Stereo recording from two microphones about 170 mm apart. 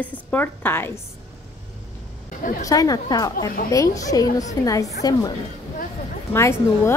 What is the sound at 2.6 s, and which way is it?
A woman's voice, 20° left (ahead or behind).